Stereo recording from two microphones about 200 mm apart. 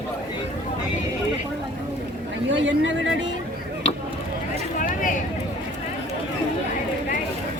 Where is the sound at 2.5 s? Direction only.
70° right (ahead or behind).